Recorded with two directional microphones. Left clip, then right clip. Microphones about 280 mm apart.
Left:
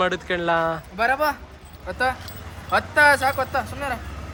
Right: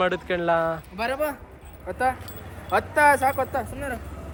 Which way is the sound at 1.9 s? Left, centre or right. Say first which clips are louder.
Left 1 dB; left.